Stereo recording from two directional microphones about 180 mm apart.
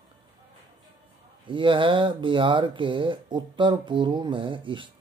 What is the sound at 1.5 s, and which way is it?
Speech, 30° right (ahead or behind).